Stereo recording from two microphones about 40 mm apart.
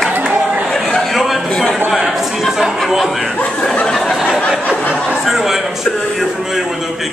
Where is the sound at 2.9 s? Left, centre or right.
Centre.